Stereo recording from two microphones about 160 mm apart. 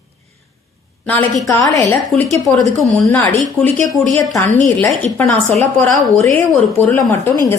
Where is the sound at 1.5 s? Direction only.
20° left (ahead or behind).